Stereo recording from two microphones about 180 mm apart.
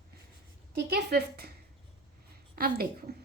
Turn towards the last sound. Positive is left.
turn(degrees=-60)  # may be behind; listen again after turning